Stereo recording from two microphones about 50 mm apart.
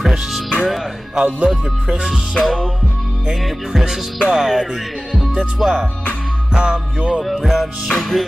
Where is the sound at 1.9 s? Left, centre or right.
Centre.